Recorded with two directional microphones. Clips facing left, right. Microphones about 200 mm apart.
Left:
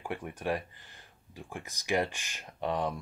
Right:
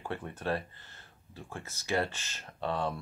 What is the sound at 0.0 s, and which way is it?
Speech, 15° left (ahead or behind).